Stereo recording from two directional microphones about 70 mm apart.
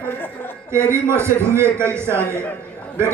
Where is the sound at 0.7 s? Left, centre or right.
Right.